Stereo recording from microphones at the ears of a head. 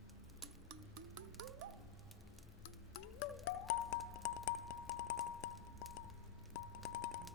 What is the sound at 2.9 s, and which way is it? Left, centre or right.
Music, left.